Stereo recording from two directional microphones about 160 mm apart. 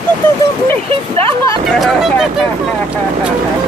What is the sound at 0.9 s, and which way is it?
Speech, 35° right (ahead or behind).